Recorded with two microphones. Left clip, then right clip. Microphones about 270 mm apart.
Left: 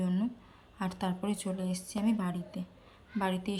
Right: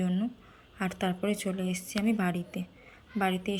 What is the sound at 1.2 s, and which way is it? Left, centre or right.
Speech, centre.